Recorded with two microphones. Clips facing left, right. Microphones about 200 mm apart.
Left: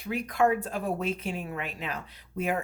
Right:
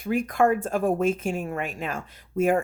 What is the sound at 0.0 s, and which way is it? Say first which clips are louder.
Speech: right 4 dB; 50° right (ahead or behind).